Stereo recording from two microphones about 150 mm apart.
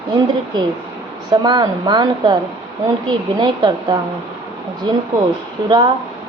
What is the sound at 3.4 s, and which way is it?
Speech, 30° right (ahead or behind).